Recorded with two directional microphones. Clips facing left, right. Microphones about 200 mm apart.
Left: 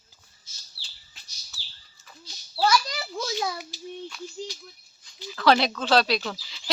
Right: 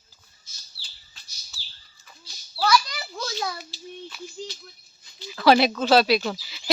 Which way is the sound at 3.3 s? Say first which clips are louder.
Even; 15° left (ahead or behind).